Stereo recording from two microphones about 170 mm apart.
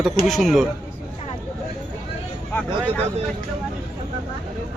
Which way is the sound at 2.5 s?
10° left (ahead or behind).